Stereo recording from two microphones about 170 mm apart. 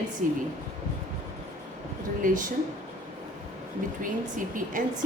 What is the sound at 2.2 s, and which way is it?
Speech, 50° right (ahead or behind).